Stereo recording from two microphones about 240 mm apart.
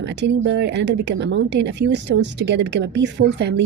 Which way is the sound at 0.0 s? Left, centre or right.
Right.